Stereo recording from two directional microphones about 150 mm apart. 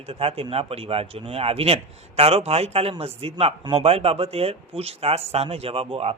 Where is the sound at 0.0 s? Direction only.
40° right (ahead or behind).